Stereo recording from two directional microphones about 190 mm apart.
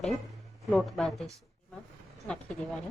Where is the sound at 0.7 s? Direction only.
5° left (ahead or behind).